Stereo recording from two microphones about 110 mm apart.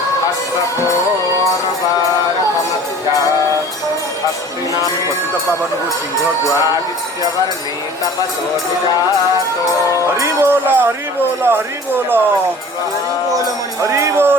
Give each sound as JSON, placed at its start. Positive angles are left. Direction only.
{"t": 10.2, "sound": "speech", "side_deg": -25}
{"t": 13.8, "sound": "music", "side_deg": -25}